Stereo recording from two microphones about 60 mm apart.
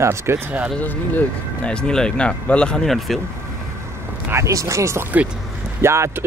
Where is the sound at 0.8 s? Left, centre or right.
Left.